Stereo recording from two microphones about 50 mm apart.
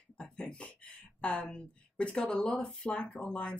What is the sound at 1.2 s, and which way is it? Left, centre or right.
Speech, left.